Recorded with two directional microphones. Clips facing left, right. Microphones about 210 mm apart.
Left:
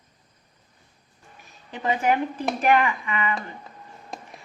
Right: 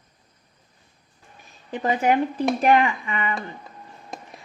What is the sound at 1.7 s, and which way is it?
Speech, 40° right (ahead or behind).